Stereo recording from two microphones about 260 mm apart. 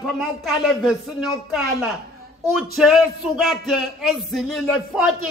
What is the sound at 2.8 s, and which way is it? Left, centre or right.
Speech, centre.